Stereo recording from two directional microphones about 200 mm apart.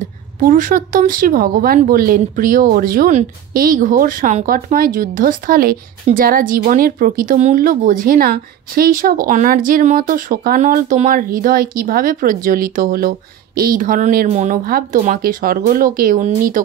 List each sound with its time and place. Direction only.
0.0 s a woman's voice: 40° right (ahead or behind)